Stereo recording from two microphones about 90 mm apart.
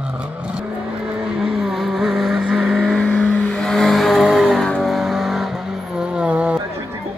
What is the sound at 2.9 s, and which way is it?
Vehicle, 10° left (ahead or behind).